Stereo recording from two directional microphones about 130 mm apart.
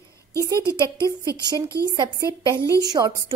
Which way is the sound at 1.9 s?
30° right (ahead or behind).